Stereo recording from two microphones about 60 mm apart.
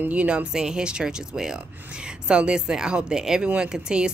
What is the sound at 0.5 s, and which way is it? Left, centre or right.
Speech, centre.